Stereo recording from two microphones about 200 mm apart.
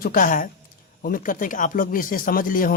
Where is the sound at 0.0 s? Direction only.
45° left (ahead or behind).